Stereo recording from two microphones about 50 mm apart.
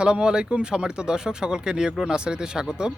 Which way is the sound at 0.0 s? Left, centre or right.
Centre.